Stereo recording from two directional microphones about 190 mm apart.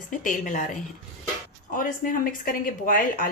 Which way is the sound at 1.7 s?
45° left (ahead or behind).